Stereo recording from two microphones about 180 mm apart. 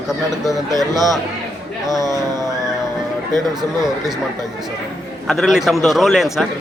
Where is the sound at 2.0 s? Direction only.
20° right (ahead or behind).